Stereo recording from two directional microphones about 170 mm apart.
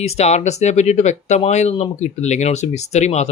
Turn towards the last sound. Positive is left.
turn(degrees=40)  # may be behind; listen again after turning